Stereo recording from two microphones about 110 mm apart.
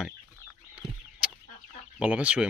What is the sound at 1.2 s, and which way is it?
Chicken, 10° right (ahead or behind).